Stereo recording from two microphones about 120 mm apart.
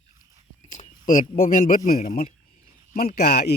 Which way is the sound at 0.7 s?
85° left.